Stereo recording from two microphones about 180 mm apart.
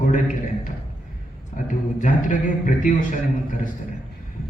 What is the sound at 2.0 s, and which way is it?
A man's voice, 45° left (ahead or behind).